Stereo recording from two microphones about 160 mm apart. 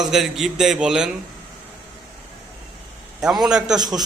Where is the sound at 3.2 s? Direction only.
5° right (ahead or behind).